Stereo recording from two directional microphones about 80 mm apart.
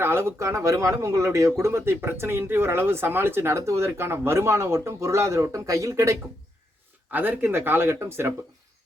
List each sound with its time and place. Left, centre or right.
0.0 s speech: right
7.1 s speech: right